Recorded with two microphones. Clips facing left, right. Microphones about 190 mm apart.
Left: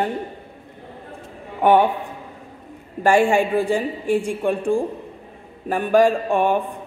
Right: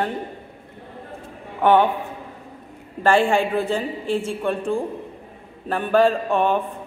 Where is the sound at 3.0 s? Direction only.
15° left (ahead or behind).